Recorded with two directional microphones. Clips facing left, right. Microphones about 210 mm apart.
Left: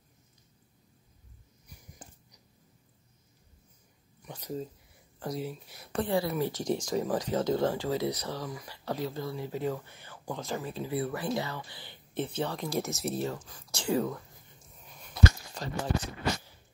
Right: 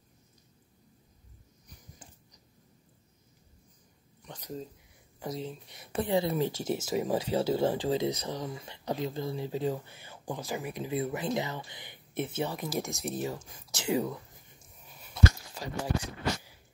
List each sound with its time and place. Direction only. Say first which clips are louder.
4.3 s speech: left 3 dB; 10° left (ahead or behind)
6.0 s speech: right 2 dB; 20° right (ahead or behind)
6.5 s speech: left 1 dB; 5° right (ahead or behind)
7.7 s speech: right 2 dB; 20° right (ahead or behind)
9.8 s speech: right 1 dB; 10° right (ahead or behind)
10.1 s a sound: even; 15° right (ahead or behind)
10.4 s speech: left 1 dB; 15° right (ahead or behind)
13.4 s speech: left 1 dB; 25° right (ahead or behind)
14.0 s a sound: left 1 dB; 15° right (ahead or behind)